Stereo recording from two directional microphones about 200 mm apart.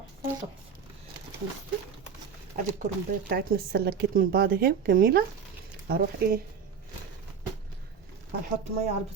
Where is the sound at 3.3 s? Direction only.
50° right (ahead or behind).